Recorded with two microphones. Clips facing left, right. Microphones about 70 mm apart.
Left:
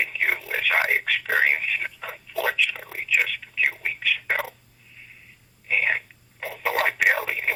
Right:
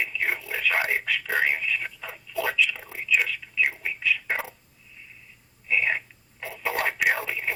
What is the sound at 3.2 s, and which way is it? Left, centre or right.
Whispering, left.